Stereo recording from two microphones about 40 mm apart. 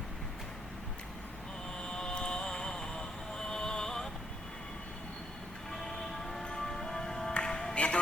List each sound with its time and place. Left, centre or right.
1.8 s a sound: left
5.7 s music: centre
6.4 s music: centre